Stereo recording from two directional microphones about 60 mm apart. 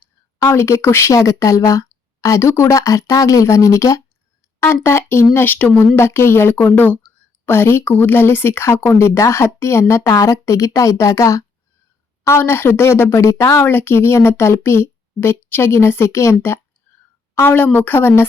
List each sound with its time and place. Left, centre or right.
0.5 s speech: left
4.6 s a woman's voice: left
5.5 s speech: left
6.0 s speech: left
7.9 s speech: left
12.2 s a woman's voice: left